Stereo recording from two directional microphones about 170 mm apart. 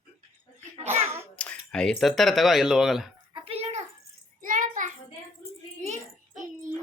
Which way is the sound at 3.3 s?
35° right (ahead or behind).